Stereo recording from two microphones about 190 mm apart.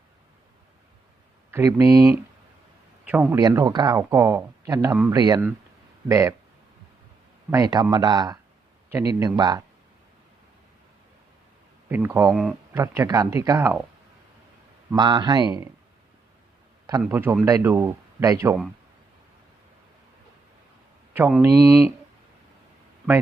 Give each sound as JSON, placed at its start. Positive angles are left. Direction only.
{"t": 1.5, "sound": "a man's voice", "side_deg": -15}
{"t": 3.3, "sound": "speech", "side_deg": -20}
{"t": 7.5, "sound": "speech", "side_deg": -20}
{"t": 11.9, "sound": "speech", "side_deg": -10}
{"t": 12.3, "sound": "speech", "side_deg": 0}
{"t": 12.7, "sound": "speech", "side_deg": -15}
{"t": 14.8, "sound": "speech", "side_deg": -20}
{"t": 17.0, "sound": "speech", "side_deg": -10}
{"t": 21.1, "sound": "speech", "side_deg": -10}